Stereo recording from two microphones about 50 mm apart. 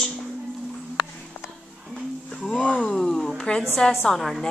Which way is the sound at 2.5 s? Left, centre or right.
Centre.